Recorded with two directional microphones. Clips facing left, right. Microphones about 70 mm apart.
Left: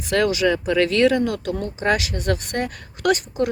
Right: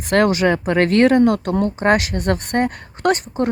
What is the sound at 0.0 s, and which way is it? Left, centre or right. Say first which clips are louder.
Speech: right 3 dB; right.